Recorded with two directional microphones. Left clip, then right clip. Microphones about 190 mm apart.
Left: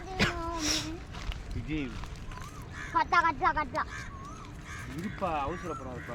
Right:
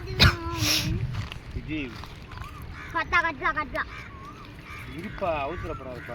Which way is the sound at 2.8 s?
Centre (ahead or behind).